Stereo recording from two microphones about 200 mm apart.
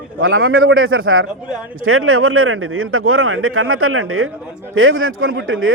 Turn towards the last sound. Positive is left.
turn(degrees=-90)